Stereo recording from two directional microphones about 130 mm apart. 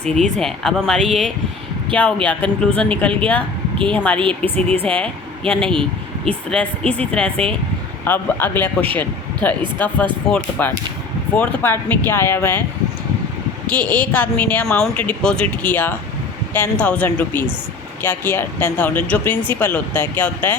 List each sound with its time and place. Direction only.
0.0 s speech: 5° left (ahead or behind)
13.7 s speech: 10° left (ahead or behind)